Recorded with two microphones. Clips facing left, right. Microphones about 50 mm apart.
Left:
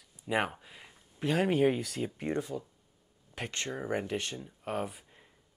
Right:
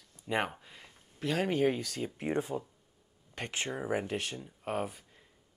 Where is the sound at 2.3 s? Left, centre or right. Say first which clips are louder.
Right 4 dB; right.